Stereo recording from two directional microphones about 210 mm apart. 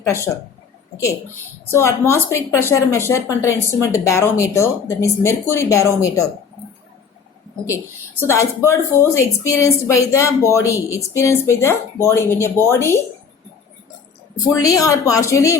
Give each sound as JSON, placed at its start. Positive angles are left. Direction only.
{"t": 0.0, "sound": "speech", "side_deg": 15}
{"t": 1.7, "sound": "a woman's voice", "side_deg": 10}
{"t": 8.2, "sound": "a woman's voice", "side_deg": 15}
{"t": 14.3, "sound": "a woman's voice", "side_deg": 15}